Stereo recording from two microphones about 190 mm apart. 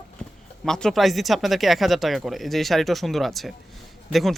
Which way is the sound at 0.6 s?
5° left (ahead or behind).